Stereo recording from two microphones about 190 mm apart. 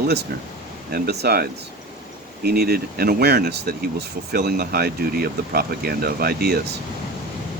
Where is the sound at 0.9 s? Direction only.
55° right (ahead or behind).